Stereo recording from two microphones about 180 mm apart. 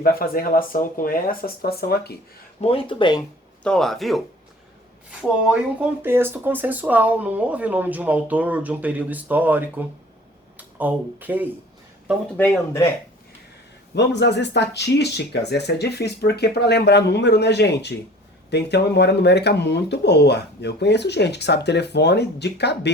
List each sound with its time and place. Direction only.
0.0 s speech: 55° left (ahead or behind)
2.6 s speech: 30° left (ahead or behind)
3.6 s speech: 5° left (ahead or behind)
5.2 s speech: 5° right (ahead or behind)
12.4 s speech: 15° left (ahead or behind)
13.9 s speech: 70° left (ahead or behind)